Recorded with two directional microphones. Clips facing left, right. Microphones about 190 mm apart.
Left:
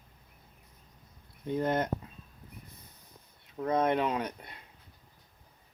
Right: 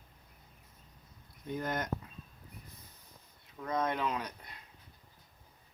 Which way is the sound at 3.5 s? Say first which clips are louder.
Left 6 dB; 30° left (ahead or behind).